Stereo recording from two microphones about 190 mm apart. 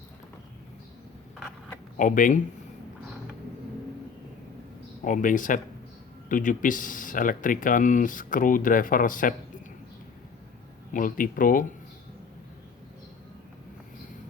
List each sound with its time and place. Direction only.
2.0 s speech: 45° left (ahead or behind)
5.0 s speech: 45° left (ahead or behind)
10.9 s speech: 45° left (ahead or behind)